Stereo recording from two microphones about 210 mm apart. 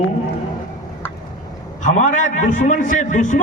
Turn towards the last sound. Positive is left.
turn(degrees=35)  # may be behind; listen again after turning